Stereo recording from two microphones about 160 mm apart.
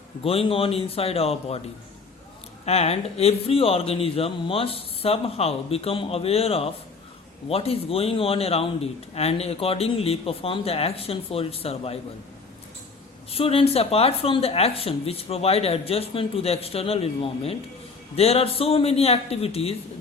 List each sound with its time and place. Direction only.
0.3 s a man's voice: 35° left (ahead or behind)
2.6 s a man's voice: 40° left (ahead or behind)
13.3 s a man's voice: 35° left (ahead or behind)